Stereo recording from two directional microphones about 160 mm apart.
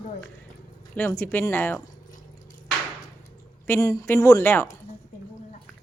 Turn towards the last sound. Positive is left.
turn(degrees=15)  # may be behind; listen again after turning